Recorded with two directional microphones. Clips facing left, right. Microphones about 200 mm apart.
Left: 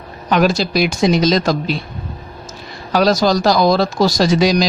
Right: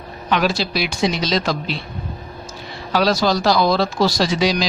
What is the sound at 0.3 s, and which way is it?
Speech, 45° left (ahead or behind).